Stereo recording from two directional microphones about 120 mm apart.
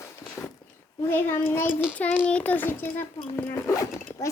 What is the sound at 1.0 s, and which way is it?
A child's voice, 20° left (ahead or behind).